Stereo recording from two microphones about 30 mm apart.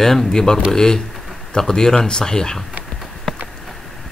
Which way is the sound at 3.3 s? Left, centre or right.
Centre.